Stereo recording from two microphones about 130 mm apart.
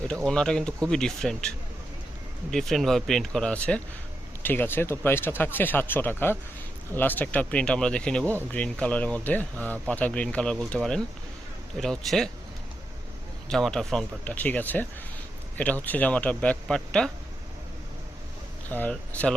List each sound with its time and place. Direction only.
0.3 s speech: 5° left (ahead or behind)
13.5 s speech: 5° left (ahead or behind)
18.7 s speech: 10° left (ahead or behind)